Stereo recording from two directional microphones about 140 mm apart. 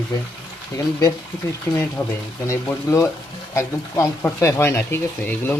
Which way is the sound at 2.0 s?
20° left (ahead or behind).